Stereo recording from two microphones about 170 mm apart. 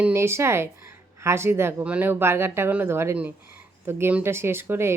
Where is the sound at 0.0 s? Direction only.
15° right (ahead or behind).